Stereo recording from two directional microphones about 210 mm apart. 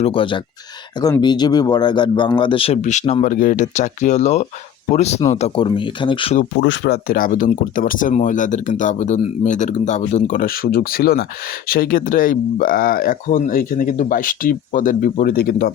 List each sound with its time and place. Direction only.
0.0 s a man's voice: 25° left (ahead or behind)
6.6 s speech: 55° left (ahead or behind)